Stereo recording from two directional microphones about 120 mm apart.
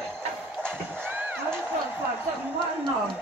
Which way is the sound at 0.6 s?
15° right (ahead or behind).